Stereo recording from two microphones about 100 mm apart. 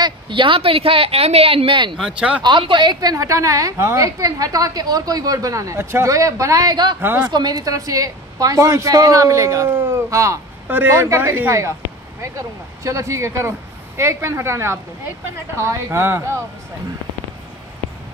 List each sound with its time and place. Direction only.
0.0 s speech: 55° right (ahead or behind)
2.0 s speech: 5° right (ahead or behind)
2.4 s a woman's voice: 50° right (ahead or behind)
7.0 s speech: 20° right (ahead or behind)
7.2 s a woman's voice: 45° right (ahead or behind); by 16.4 s 25° right (ahead or behind)